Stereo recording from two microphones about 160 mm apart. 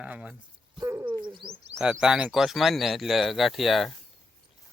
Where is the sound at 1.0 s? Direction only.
30° right (ahead or behind).